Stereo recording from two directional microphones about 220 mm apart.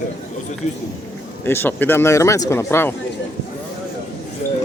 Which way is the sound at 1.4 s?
10° left (ahead or behind).